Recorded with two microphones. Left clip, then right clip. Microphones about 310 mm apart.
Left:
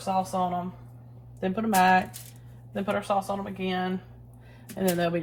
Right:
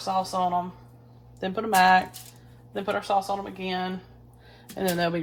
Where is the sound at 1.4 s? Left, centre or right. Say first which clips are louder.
Right 2 dB; right.